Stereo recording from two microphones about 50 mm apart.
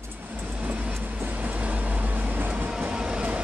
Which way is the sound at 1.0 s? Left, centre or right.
Right.